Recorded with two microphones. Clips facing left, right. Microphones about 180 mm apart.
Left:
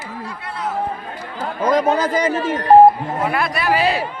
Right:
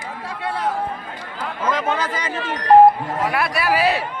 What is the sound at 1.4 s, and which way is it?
Speech, 40° left (ahead or behind).